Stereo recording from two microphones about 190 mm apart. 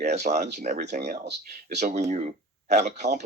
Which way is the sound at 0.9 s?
40° right (ahead or behind).